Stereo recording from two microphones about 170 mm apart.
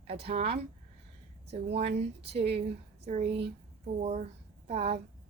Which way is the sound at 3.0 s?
40° right (ahead or behind).